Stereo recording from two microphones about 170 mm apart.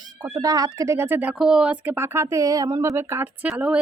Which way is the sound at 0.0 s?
25° right (ahead or behind).